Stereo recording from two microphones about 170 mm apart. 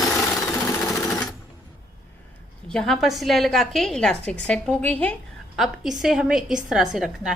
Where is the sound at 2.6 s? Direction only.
5° left (ahead or behind).